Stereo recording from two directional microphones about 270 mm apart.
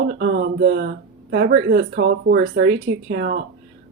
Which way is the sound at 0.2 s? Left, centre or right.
Right.